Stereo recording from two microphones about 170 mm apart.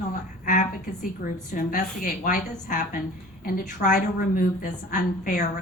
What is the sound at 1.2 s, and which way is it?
A woman's voice, 50° left (ahead or behind).